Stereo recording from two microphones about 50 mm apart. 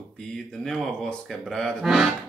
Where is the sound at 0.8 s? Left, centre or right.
Centre.